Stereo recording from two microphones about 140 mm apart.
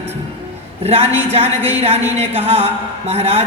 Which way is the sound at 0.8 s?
45° right (ahead or behind).